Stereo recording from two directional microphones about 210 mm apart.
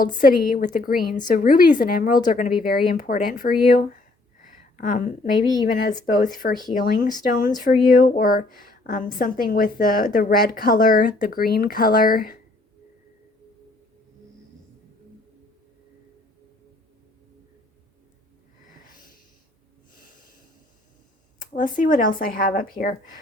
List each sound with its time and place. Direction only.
0.2 s a woman's voice: 40° left (ahead or behind)
4.4 s a sound: 40° left (ahead or behind)
5.5 s speech: 20° left (ahead or behind)
6.2 s a woman's voice: 40° left (ahead or behind)
18.9 s snort: 40° left (ahead or behind)
21.5 s speech: 40° left (ahead or behind)